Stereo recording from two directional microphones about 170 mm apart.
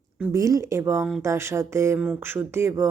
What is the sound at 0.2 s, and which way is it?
Speech, 20° right (ahead or behind).